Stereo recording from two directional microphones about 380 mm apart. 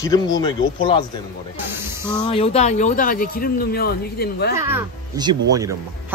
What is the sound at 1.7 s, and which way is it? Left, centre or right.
Speech, centre.